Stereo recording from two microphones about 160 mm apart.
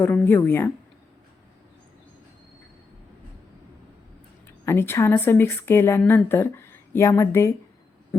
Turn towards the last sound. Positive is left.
turn(degrees=15)  # may be behind; listen again after turning